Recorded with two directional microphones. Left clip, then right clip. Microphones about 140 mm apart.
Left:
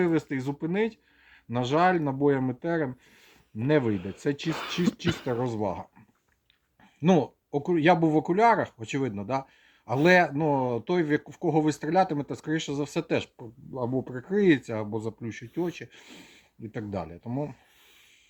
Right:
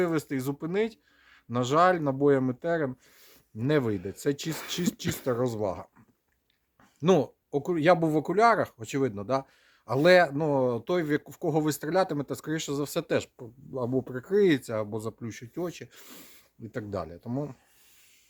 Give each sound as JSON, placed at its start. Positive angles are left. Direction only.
{"t": 0.0, "sound": "speech", "side_deg": -35}
{"t": 7.0, "sound": "speech", "side_deg": -40}